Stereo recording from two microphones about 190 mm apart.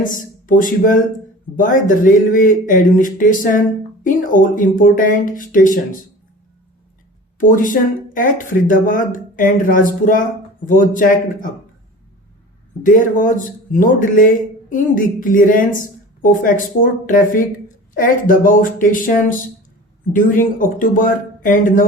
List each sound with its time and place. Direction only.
0.0 s speech: 45° left (ahead or behind)
7.3 s speech: 45° left (ahead or behind)
12.8 s speech: 45° left (ahead or behind)